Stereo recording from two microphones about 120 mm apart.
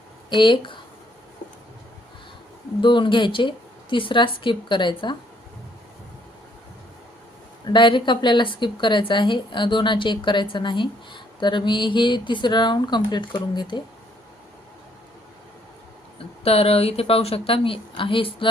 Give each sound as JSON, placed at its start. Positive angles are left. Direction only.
{"t": 0.3, "sound": "speech", "side_deg": 40}
{"t": 2.8, "sound": "a woman's voice", "side_deg": 40}
{"t": 7.7, "sound": "speech", "side_deg": 40}
{"t": 16.4, "sound": "a woman's voice", "side_deg": 55}